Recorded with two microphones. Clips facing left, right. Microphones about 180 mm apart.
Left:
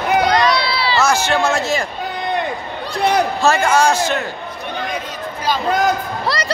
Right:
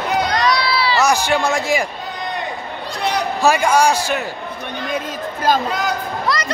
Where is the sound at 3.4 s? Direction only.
10° right (ahead or behind).